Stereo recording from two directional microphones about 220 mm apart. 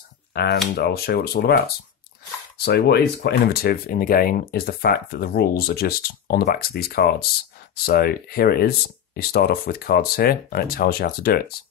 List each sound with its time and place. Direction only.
0.3 s speech: 45° left (ahead or behind)